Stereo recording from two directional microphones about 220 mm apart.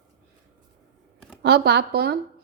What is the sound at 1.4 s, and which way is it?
Speech, 50° right (ahead or behind).